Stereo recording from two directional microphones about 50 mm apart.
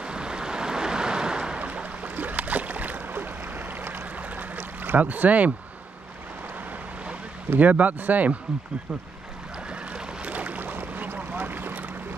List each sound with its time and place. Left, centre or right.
0.0 s waves: centre
1.6 s boat: right
4.4 s boat: right
7.4 s a man's voice: right
10.2 s boat: right